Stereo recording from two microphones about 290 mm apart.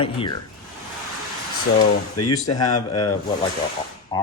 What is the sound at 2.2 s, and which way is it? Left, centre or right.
Speech, left.